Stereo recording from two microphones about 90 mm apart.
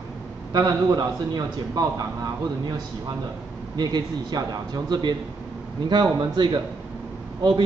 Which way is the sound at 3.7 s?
50° right (ahead or behind).